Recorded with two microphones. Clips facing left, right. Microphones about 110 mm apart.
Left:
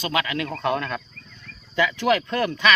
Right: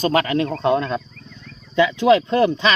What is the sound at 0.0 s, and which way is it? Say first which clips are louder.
Speech: right 7 dB; 40° right (ahead or behind).